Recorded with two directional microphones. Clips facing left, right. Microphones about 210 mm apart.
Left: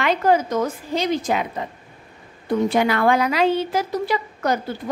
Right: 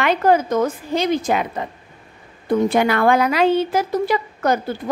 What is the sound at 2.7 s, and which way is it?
A woman's voice, 55° right (ahead or behind).